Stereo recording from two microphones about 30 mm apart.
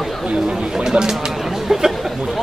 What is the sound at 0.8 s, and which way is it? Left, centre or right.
Speech, centre.